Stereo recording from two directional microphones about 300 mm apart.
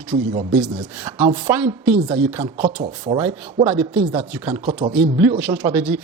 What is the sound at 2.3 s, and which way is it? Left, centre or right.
Speech, centre.